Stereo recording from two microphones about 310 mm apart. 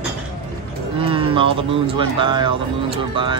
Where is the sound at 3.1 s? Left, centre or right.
Centre.